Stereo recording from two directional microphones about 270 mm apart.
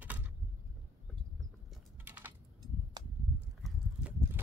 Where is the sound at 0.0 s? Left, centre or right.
Centre.